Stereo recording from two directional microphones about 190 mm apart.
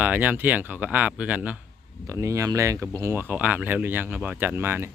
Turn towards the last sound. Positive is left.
turn(degrees=-10)  # may be behind; listen again after turning